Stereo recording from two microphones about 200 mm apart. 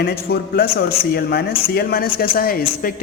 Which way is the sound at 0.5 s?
50° left (ahead or behind).